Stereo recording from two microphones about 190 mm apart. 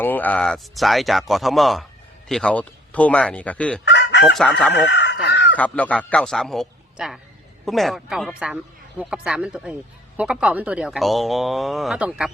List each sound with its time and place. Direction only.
0.0 s speech: 10° left (ahead or behind)
3.8 s chicken: 65° left (ahead or behind)
5.5 s speech: 5° left (ahead or behind)